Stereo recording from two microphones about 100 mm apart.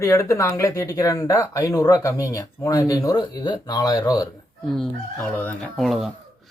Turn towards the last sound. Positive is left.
turn(degrees=0)  # may be behind; listen again after turning